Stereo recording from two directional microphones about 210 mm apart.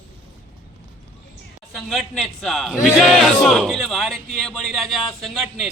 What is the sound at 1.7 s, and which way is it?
A man's voice, centre (ahead or behind).